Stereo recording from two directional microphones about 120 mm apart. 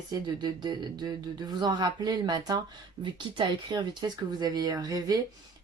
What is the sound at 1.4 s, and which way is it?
Speech, 35° right (ahead or behind).